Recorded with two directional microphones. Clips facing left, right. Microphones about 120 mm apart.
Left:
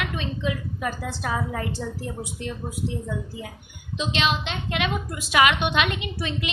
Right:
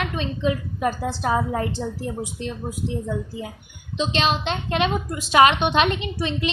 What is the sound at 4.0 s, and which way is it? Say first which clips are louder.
A woman's voice: right 3 dB; 35° right (ahead or behind).